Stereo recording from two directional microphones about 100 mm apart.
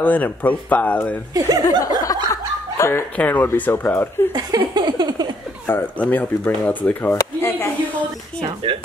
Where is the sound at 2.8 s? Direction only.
25° left (ahead or behind).